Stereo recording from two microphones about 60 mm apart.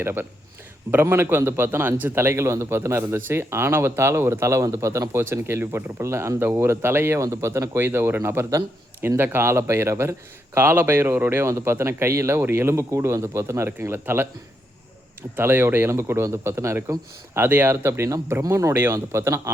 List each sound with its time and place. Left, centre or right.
0.0 s a man's voice: right
5.2 s a man's voice: right
6.4 s a man's voice: right
7.2 s a man's voice: right
12.4 s a man's voice: right
12.9 s a man's voice: right
15.4 s a man's voice: right